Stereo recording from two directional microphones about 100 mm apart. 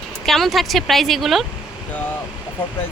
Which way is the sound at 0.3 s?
Centre (ahead or behind).